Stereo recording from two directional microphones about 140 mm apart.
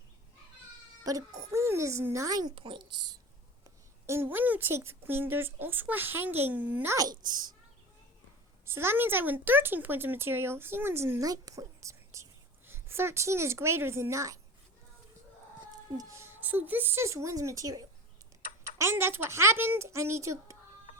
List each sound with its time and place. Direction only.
1.0 s a woman's voice: 25° right (ahead or behind)
4.0 s a woman's voice: 20° right (ahead or behind)
6.9 s a woman's voice: 25° right (ahead or behind)
8.6 s speech: 15° right (ahead or behind)
16.0 s a woman's voice: 20° right (ahead or behind)